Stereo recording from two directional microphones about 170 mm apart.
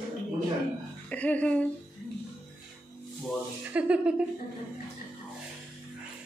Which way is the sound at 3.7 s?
5° right (ahead or behind).